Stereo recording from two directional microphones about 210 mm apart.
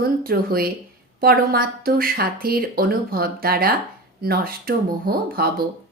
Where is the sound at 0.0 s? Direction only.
45° right (ahead or behind).